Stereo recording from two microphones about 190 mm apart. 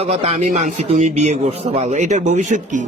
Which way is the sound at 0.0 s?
30° right (ahead or behind).